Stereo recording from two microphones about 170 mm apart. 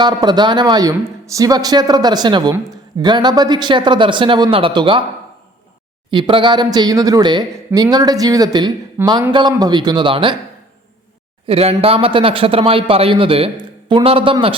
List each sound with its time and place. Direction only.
0.0 s a woman's voice: 25° right (ahead or behind)
6.1 s a woman's voice: 30° right (ahead or behind)
9.3 s a woman's voice: 25° right (ahead or behind)
11.4 s speech: 35° right (ahead or behind)